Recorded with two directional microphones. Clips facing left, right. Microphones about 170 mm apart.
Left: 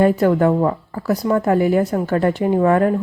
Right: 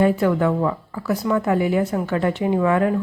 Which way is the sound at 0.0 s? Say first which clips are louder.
Left 3 dB; 40° left (ahead or behind).